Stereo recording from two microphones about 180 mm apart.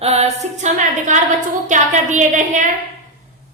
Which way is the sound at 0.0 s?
35° right (ahead or behind).